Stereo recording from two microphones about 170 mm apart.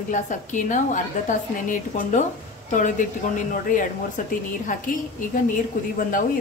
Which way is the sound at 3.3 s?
50° left (ahead or behind).